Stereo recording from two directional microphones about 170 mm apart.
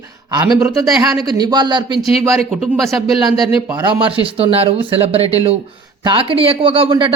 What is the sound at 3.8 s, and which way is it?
A man's voice, 25° right (ahead or behind).